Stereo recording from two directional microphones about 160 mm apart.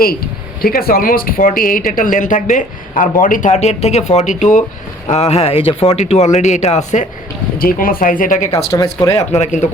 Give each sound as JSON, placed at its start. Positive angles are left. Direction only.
{"t": 0.6, "sound": "speech", "side_deg": 70}
{"t": 5.1, "sound": "speech", "side_deg": 40}
{"t": 7.6, "sound": "speech", "side_deg": 65}
{"t": 8.4, "sound": "speech", "side_deg": 20}
{"t": 9.1, "sound": "speech", "side_deg": 45}